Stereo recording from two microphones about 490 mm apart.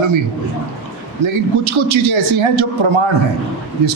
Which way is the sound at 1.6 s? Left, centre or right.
Right.